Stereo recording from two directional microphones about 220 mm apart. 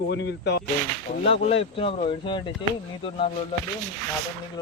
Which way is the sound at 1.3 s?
25° left (ahead or behind).